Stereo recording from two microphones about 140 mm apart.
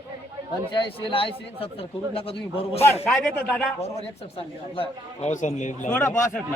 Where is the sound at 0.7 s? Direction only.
40° left (ahead or behind).